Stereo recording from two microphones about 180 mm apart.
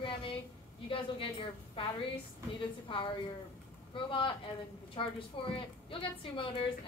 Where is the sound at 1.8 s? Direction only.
30° left (ahead or behind).